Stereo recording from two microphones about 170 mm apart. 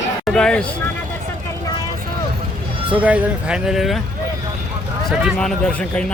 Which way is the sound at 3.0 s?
5° right (ahead or behind).